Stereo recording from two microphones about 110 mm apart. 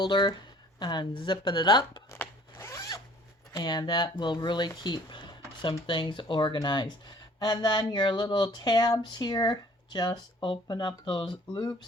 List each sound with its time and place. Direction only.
0.0 s speech: 45° left (ahead or behind)
2.0 s zipper: 20° left (ahead or behind)
3.6 s speech: 40° left (ahead or behind)